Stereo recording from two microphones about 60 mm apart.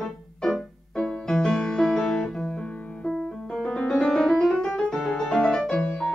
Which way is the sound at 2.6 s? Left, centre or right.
Left.